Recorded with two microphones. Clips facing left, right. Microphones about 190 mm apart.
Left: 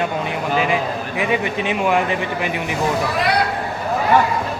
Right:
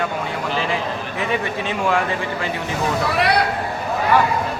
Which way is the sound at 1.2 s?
15° left (ahead or behind).